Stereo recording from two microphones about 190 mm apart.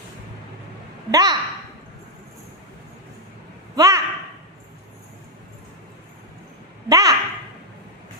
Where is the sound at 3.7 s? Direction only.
20° right (ahead or behind).